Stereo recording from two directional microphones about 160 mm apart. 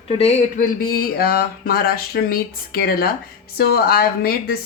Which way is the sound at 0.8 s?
70° left (ahead or behind).